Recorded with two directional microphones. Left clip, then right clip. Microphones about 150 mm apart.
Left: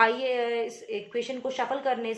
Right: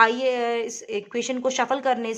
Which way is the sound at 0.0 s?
45° right (ahead or behind).